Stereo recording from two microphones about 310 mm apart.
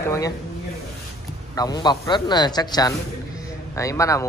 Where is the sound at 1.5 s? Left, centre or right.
Centre.